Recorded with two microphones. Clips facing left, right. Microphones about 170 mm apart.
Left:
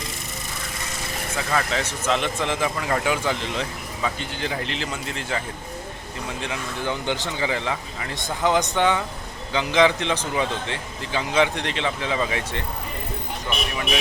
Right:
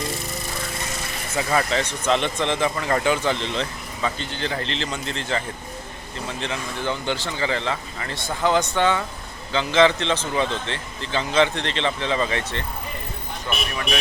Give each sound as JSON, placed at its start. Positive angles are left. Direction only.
{"t": 1.5, "sound": "speech", "side_deg": -5}
{"t": 6.4, "sound": "speech", "side_deg": 10}